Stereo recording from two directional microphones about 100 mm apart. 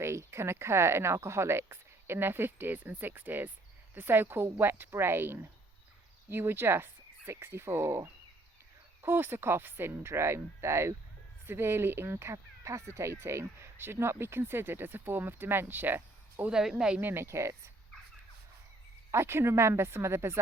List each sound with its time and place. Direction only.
0.0 s speech: 25° right (ahead or behind)
16.5 s speech: 5° right (ahead or behind)
17.0 s speech: 20° right (ahead or behind)
19.1 s speech: 25° right (ahead or behind)